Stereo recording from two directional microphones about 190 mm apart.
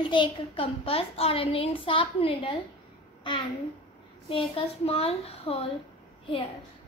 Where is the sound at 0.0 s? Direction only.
25° left (ahead or behind).